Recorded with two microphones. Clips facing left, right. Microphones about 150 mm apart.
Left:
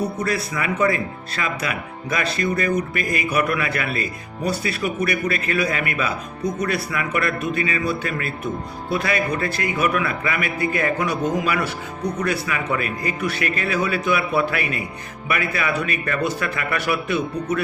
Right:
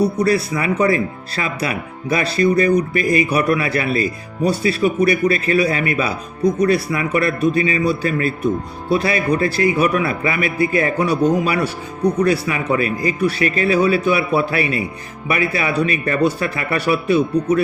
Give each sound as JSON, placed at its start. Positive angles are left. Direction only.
{"t": 0.2, "sound": "speech", "side_deg": -35}